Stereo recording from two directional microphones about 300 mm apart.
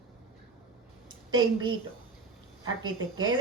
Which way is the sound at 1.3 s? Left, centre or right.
Centre.